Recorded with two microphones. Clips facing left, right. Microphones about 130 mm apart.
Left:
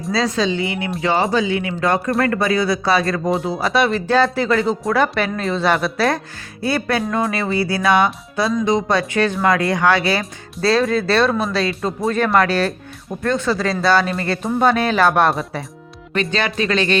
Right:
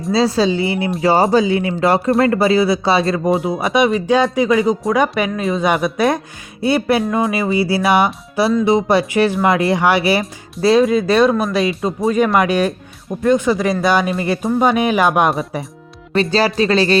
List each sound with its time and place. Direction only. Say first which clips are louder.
0.1 s speech: right 4 dB; 30° right (ahead or behind)
3.2 s speech: right 3 dB; centre (ahead or behind)
3.6 s speech: right 3 dB; 15° right (ahead or behind)
5.6 s speech: right 2 dB; 15° right (ahead or behind)
7.1 s speech: right 3 dB; 10° right (ahead or behind)
7.5 s speech: right 1 dB; 25° right (ahead or behind)
11.7 s speech: right 3 dB; 5° right (ahead or behind)
16.1 s speech: right 5 dB; 35° right (ahead or behind)